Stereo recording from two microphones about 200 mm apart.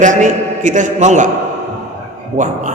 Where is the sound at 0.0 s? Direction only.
40° right (ahead or behind).